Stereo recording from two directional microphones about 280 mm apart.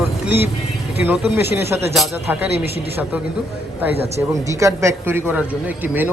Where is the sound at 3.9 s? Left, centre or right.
Right.